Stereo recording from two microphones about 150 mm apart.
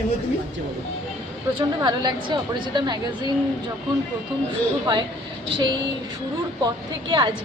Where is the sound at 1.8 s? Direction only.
30° right (ahead or behind).